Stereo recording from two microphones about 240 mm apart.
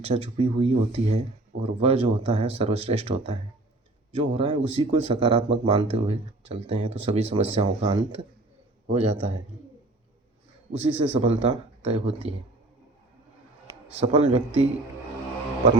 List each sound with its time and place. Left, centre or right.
0.0 s speech: right
10.7 s speech: right
13.9 s speech: right